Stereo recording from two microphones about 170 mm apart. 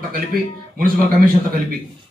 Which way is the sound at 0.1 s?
60° right (ahead or behind).